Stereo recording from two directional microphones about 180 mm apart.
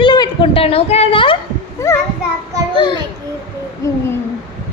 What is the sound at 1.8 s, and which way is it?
Speech, 15° left (ahead or behind).